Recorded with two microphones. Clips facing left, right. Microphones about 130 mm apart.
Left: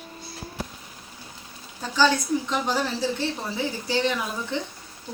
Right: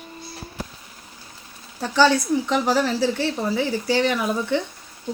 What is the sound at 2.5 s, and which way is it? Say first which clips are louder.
Speech: right 5 dB; 75° right (ahead or behind).